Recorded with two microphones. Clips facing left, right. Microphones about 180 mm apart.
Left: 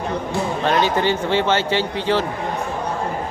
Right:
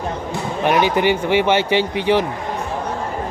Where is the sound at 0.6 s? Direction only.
15° right (ahead or behind).